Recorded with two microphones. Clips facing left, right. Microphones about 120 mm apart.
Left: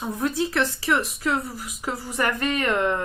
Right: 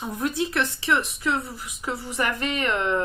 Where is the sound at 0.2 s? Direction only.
30° left (ahead or behind).